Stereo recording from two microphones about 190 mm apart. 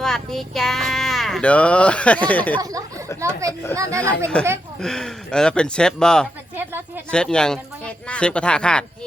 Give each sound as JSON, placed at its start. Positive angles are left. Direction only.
{"t": 0.0, "sound": "speech", "side_deg": 0}
{"t": 3.2, "sound": "speech", "side_deg": -15}
{"t": 4.8, "sound": "speech", "side_deg": 0}
{"t": 6.6, "sound": "a sound", "side_deg": -10}
{"t": 7.1, "sound": "speech", "side_deg": 5}